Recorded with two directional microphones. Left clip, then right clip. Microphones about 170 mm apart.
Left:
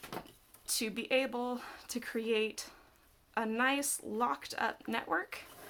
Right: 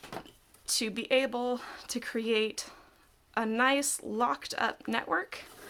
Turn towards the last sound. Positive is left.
turn(degrees=-30)  # may be behind; listen again after turning